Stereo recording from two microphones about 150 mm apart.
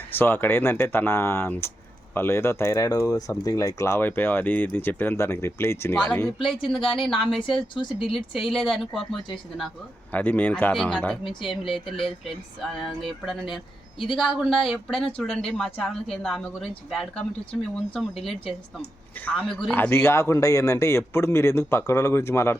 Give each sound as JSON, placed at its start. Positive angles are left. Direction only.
{"t": 0.1, "sound": "speech", "side_deg": 15}
{"t": 6.7, "sound": "speech", "side_deg": 0}
{"t": 7.4, "sound": "speech", "side_deg": 30}
{"t": 8.0, "sound": "speech", "side_deg": 0}
{"t": 10.1, "sound": "speech", "side_deg": 10}
{"t": 11.2, "sound": "speech", "side_deg": 35}
{"t": 11.9, "sound": "speech", "side_deg": 0}
{"t": 19.7, "sound": "speech", "side_deg": 15}